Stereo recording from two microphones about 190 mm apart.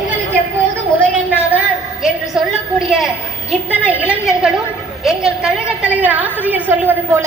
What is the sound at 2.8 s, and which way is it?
A man's voice, 5° right (ahead or behind).